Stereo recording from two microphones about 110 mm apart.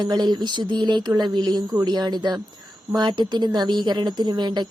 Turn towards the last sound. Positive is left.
turn(degrees=-40)  # may be behind; listen again after turning